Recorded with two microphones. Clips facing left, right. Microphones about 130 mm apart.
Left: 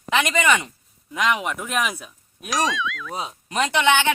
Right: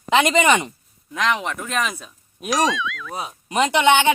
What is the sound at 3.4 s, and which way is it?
Speech, 20° right (ahead or behind).